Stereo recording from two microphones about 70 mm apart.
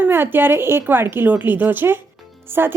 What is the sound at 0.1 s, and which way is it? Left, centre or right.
A woman's voice, right.